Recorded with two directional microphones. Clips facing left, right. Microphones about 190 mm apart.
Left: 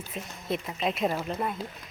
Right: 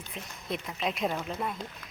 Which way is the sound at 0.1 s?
5° left (ahead or behind).